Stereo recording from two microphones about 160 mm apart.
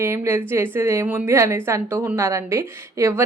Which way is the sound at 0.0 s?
15° right (ahead or behind).